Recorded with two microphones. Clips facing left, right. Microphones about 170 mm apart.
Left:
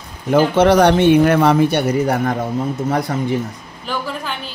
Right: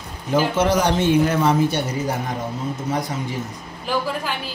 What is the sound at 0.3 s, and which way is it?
Speech, 60° left (ahead or behind).